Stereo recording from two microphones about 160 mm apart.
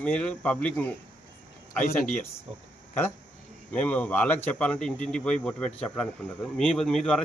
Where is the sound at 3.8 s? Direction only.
10° left (ahead or behind).